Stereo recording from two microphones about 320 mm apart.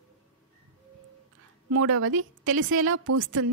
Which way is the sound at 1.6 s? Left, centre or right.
Right.